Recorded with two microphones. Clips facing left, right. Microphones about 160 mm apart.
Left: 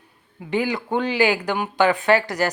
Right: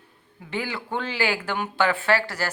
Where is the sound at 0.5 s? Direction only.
15° left (ahead or behind).